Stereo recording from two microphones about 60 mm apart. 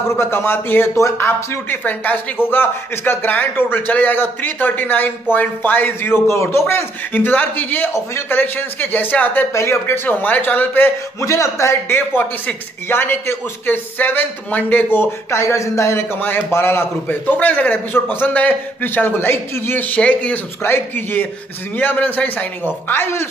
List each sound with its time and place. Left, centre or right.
0.1 s a man's voice: left
0.9 s a man's voice: left
7.9 s speech: left
8.4 s a man's voice: left
9.5 s speech: left
10.0 s a man's voice: left
11.1 s speech: left
12.2 s a man's voice: left
15.4 s speech: left
16.5 s a man's voice: left
19.7 s a man's voice: left
20.6 s a man's voice: left
22.8 s a man's voice: left